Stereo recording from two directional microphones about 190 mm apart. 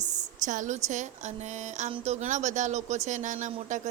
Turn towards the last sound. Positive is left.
turn(degrees=-40)  # may be behind; listen again after turning